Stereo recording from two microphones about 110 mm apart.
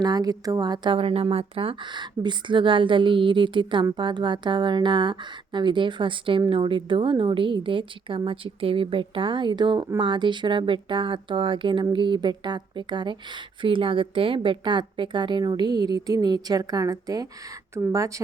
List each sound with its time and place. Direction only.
0.0 s a woman's voice: 35° right (ahead or behind)